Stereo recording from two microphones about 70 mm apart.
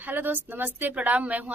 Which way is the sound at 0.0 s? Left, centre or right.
Right.